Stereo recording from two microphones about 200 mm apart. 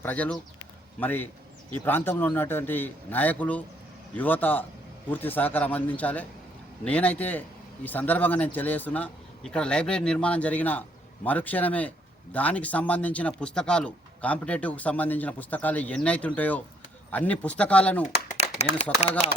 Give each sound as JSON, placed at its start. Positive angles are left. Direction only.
{"t": 0.0, "sound": "a man's voice", "side_deg": 10}
{"t": 18.3, "sound": "a sound", "side_deg": 30}
{"t": 19.2, "sound": "speech", "side_deg": 30}